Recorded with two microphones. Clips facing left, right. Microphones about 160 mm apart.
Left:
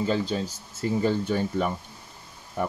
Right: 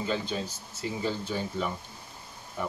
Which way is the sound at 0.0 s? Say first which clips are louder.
Left 5 dB; 40° left (ahead or behind).